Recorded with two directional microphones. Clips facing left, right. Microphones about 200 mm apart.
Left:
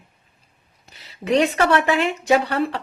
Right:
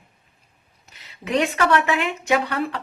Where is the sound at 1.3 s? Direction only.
35° left (ahead or behind).